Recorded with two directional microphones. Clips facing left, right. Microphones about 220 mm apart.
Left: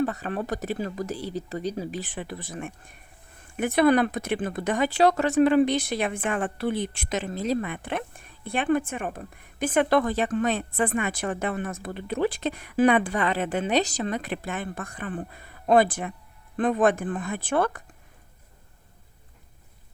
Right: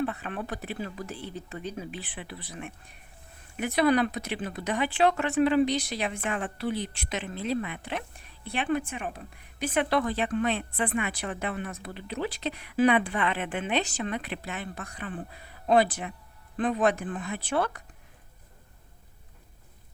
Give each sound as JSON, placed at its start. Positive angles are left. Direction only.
{"t": 0.0, "sound": "speech", "side_deg": 40}